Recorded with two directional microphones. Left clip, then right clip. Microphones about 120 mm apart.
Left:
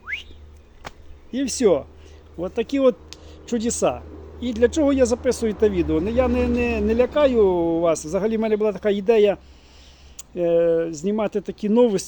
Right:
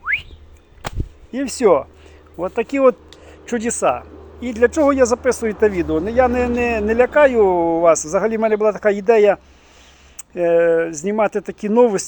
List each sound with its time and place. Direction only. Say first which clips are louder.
1.3 s a man's voice: right 4 dB; 30° left (ahead or behind)